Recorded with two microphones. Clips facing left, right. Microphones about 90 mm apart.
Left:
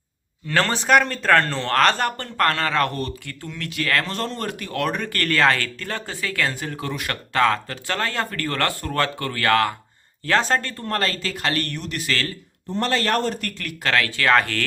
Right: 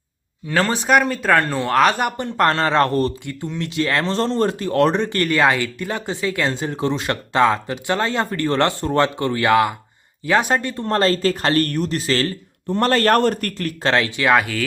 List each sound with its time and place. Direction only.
0.4 s speech: 10° right (ahead or behind); by 3.1 s 35° right (ahead or behind)
3.2 s speech: 20° right (ahead or behind)
10.8 s speech: 30° right (ahead or behind)
12.7 s a man's voice: 50° right (ahead or behind)
13.6 s speech: 35° right (ahead or behind)
13.9 s speech: 20° right (ahead or behind)